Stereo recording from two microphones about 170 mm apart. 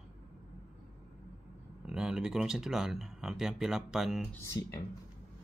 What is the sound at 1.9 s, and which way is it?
Speech, 5° right (ahead or behind).